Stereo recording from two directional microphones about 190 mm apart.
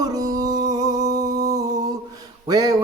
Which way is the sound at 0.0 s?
20° right (ahead or behind).